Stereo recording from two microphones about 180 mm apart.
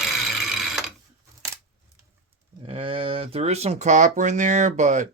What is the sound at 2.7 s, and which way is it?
Speech, 30° right (ahead or behind).